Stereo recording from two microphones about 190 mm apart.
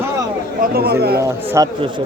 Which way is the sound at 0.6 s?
55° right (ahead or behind).